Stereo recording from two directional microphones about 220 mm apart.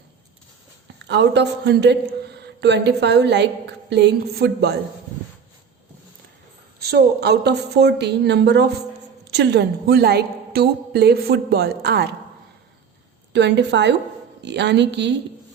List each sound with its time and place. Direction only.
0.9 s speech: 50° right (ahead or behind)
6.8 s speech: 50° right (ahead or behind)
13.3 s speech: 50° right (ahead or behind)